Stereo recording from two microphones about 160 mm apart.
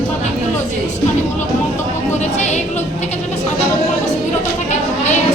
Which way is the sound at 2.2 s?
45° left (ahead or behind).